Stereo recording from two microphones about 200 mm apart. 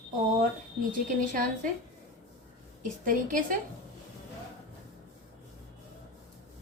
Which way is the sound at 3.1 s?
40° right (ahead or behind).